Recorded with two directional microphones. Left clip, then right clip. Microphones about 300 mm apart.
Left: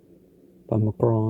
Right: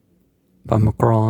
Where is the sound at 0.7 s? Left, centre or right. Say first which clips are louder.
Right 5 dB; right.